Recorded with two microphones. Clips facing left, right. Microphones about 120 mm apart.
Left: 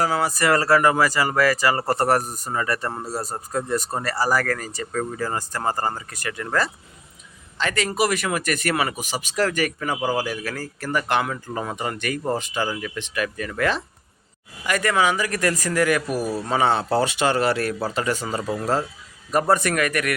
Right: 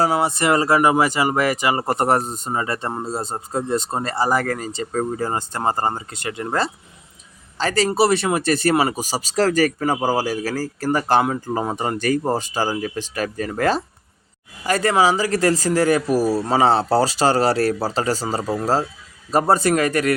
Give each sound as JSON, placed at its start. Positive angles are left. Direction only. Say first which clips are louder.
{"t": 0.0, "sound": "speech", "louder": "right 3 dB", "side_deg": -25}